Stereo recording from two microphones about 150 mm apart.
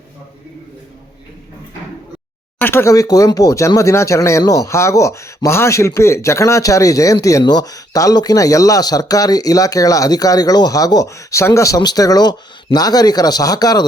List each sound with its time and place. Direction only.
2.6 s speech: 15° left (ahead or behind)